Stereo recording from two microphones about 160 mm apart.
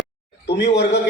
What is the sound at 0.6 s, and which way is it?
Speech, 90° left.